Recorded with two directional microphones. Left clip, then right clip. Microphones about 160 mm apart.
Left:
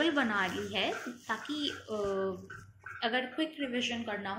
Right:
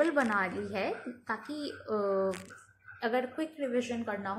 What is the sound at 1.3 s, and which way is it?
A woman's voice, 30° right (ahead or behind).